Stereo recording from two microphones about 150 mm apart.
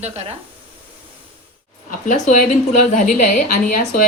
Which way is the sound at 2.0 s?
60° left (ahead or behind).